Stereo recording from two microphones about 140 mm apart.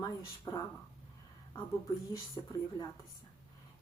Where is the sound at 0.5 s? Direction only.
25° left (ahead or behind).